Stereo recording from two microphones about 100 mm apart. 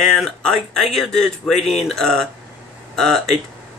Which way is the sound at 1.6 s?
90° left.